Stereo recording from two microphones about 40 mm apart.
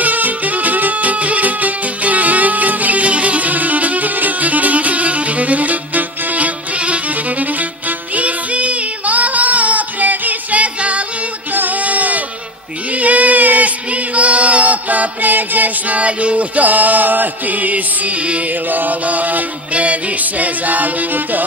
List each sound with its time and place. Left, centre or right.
0.0 s music: right
8.1 s child singing: right
11.5 s music: right
12.9 s a sound: right
18.5 s music: right